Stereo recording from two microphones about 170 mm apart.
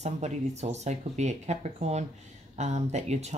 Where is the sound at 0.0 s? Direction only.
40° right (ahead or behind).